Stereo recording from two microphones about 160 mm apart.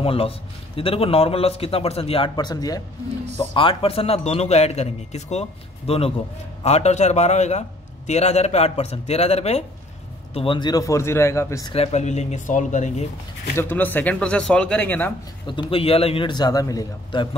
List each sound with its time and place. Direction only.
0.0 s a man's voice: 35° left (ahead or behind)
3.5 s a man's voice: 35° left (ahead or behind); by 11.7 s 20° left (ahead or behind)
11.7 s speech: 40° left (ahead or behind)
13.6 s speech: 10° left (ahead or behind)
15.4 s a man's voice: 35° left (ahead or behind)